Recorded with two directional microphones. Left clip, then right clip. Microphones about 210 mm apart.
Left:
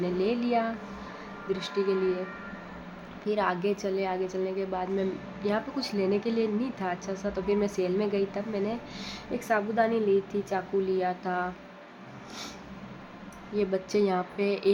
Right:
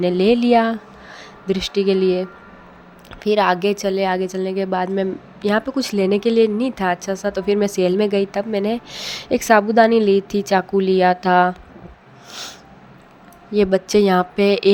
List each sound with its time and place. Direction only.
0.0 s speech: 40° right (ahead or behind)
3.2 s a woman's voice: 45° right (ahead or behind)
12.3 s a woman's voice: 30° right (ahead or behind)